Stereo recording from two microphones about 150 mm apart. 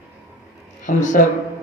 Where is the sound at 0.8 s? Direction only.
60° left (ahead or behind).